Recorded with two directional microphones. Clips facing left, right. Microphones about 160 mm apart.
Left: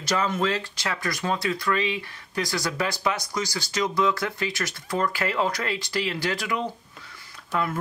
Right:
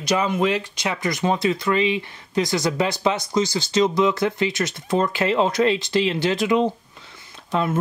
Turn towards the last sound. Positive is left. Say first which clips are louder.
# right 4 dB
turn(degrees=-25)  # may be behind; listen again after turning